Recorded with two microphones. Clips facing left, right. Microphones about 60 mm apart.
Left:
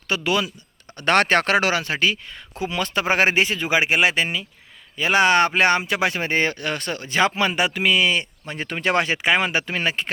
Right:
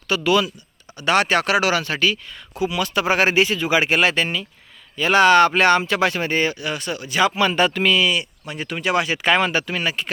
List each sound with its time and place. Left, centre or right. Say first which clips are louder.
0.1 s speech: right 4 dB; left
0.9 s speech: even; left
7.4 s speech: right 3 dB; centre
7.9 s speech: even; left
9.2 s speech: right 2 dB; centre